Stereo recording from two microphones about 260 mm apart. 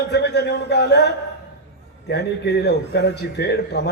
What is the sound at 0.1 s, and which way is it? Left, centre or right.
A man's voice, left.